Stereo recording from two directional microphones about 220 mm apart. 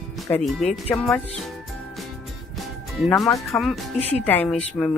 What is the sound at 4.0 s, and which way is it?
Speech, 30° left (ahead or behind).